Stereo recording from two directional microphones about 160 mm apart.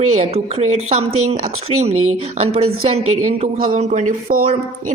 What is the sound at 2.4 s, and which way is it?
Speech, 40° right (ahead or behind).